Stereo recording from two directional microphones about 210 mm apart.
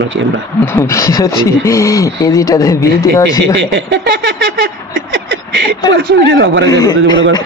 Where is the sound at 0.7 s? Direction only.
15° left (ahead or behind).